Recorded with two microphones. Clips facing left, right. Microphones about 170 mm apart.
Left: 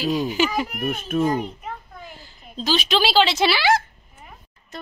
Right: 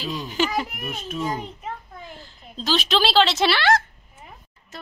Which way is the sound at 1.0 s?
55° left (ahead or behind).